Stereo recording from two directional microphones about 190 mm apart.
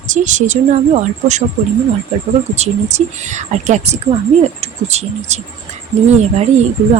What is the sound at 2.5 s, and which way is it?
Speech, 35° right (ahead or behind).